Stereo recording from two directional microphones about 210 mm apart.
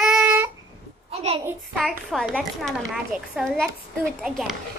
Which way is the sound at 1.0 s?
25° right (ahead or behind).